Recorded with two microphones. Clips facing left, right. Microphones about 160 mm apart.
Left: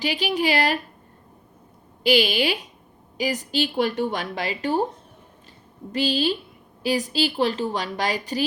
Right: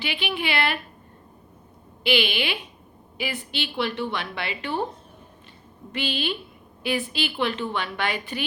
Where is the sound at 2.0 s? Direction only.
40° left (ahead or behind).